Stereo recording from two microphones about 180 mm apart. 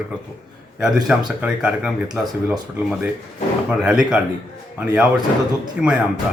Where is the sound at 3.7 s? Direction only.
5° right (ahead or behind).